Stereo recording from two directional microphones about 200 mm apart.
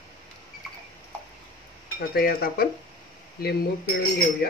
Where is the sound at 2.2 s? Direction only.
50° left (ahead or behind).